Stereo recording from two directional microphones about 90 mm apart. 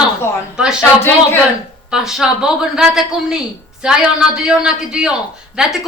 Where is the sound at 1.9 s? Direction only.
5° right (ahead or behind).